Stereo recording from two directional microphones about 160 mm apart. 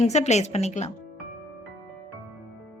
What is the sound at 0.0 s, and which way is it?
Speech, 45° left (ahead or behind).